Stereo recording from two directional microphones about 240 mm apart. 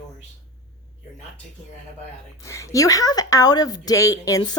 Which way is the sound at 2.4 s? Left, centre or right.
Centre.